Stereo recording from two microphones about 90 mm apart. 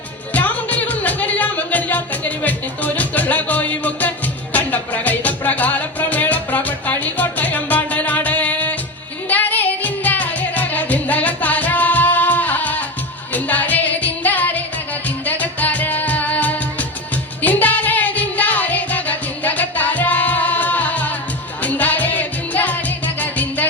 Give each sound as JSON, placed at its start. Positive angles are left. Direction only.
{"t": 0.3, "sound": "music", "side_deg": 15}